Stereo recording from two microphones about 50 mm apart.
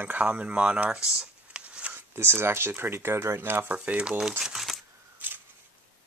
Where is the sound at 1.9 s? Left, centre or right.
Right.